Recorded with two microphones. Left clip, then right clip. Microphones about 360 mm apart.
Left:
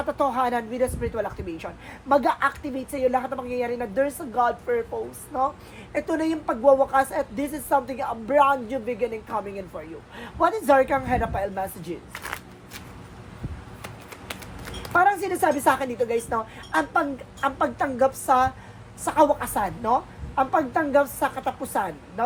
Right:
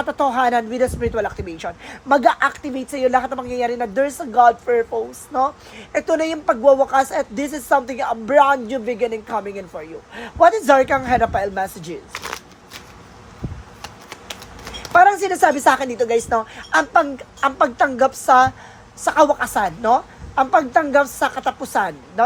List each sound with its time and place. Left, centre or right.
0.0 s speech: right
6.1 s speech: right
14.9 s speech: right